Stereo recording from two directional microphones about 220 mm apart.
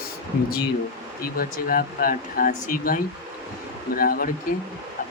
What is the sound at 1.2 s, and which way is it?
A man's voice, 40° left (ahead or behind).